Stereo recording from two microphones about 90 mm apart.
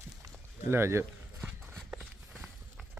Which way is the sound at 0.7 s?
30° right (ahead or behind).